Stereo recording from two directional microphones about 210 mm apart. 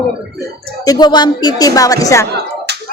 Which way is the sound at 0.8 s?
20° left (ahead or behind).